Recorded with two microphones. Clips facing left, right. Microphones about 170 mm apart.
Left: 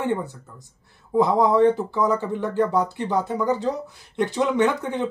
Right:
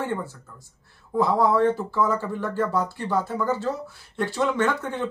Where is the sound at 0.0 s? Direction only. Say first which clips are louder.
Left 4 dB; 20° left (ahead or behind).